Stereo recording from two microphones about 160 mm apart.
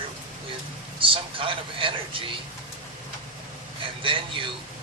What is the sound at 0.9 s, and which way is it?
Speech, 35° right (ahead or behind).